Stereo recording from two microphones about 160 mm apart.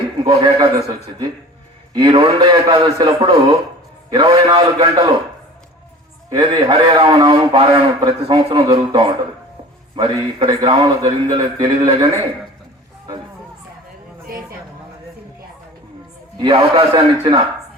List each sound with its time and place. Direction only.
0.3 s a man's voice: 35° right (ahead or behind)
6.3 s a man's voice: 30° right (ahead or behind)
16.4 s a man's voice: 35° right (ahead or behind)